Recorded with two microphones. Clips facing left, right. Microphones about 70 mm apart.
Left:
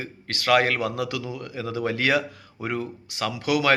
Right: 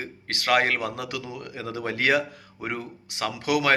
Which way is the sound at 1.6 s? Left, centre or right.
Right.